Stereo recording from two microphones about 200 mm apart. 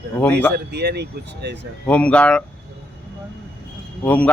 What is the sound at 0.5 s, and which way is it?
Speech, 55° right (ahead or behind).